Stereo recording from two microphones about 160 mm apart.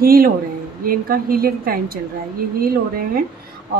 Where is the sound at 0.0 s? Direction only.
65° right (ahead or behind).